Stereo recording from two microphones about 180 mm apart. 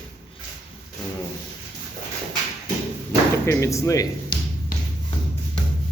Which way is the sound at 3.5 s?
15° left (ahead or behind).